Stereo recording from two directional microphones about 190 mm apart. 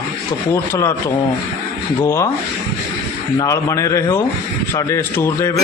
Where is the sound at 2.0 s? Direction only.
15° left (ahead or behind).